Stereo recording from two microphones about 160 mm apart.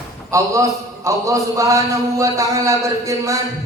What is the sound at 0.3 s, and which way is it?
A man's voice, 20° right (ahead or behind).